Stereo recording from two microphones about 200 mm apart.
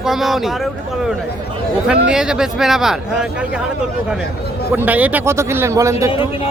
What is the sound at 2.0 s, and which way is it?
A man's voice, 5° right (ahead or behind).